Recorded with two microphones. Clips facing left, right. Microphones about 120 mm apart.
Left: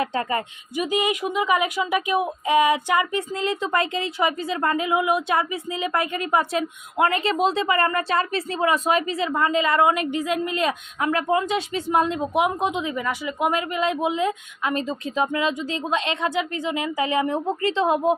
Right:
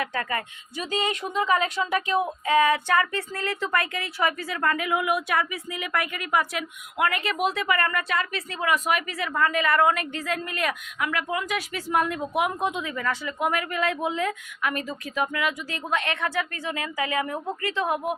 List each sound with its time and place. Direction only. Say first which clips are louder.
0.0 s speech: left 4 dB; 25° left (ahead or behind)
0.9 s speech: left 4 dB; 15° left (ahead or behind)